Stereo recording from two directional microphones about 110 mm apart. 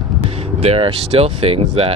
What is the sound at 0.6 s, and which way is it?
Speech, 65° right (ahead or behind).